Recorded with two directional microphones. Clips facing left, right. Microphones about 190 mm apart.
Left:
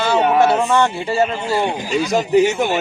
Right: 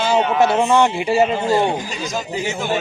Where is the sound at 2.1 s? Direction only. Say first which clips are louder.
Left 11 dB; 65° left (ahead or behind).